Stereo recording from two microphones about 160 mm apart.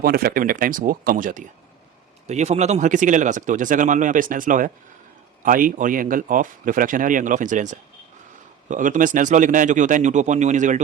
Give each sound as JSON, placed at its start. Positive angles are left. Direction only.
{"t": 0.0, "sound": "a man's voice", "side_deg": -70}
{"t": 2.2, "sound": "a man's voice", "side_deg": -45}